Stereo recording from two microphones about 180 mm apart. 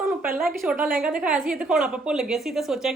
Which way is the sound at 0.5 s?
Centre (ahead or behind).